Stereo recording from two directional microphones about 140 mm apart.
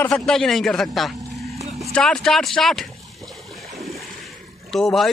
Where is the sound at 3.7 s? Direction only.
Centre (ahead or behind).